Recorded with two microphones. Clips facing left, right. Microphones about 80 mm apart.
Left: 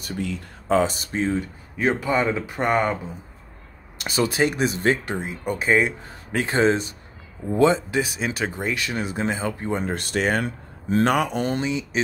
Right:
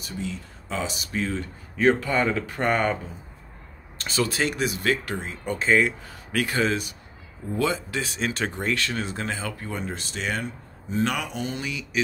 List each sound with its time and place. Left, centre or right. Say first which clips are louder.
0.0 s speech: left 4 dB; left
1.3 s speech: left 5 dB; centre
4.0 s speech: left 4 dB; left
8.0 s speech: left 2 dB; centre
9.8 s speech: left 8 dB; left
10.4 s speech: left 5 dB; left
11.1 s speech: left 7 dB; left
11.6 s speech: left 6 dB; left